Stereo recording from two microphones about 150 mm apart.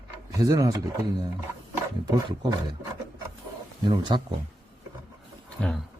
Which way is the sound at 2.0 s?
30° right (ahead or behind).